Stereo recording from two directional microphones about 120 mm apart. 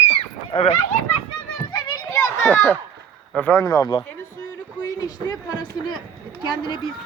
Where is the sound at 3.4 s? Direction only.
15° left (ahead or behind).